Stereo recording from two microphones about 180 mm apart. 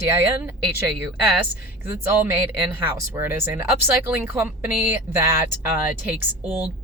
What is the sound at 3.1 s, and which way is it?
Speech, 15° right (ahead or behind).